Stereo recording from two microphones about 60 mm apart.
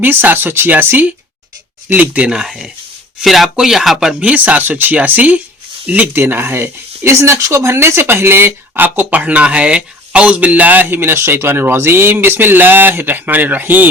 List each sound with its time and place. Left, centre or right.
0.0 s speech: right
2.3 s speech: centre
4.2 s speech: right
6.1 s speech: right
10.8 s speech: right